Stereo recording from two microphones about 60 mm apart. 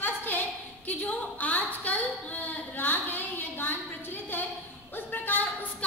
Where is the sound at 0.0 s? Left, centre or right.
Left.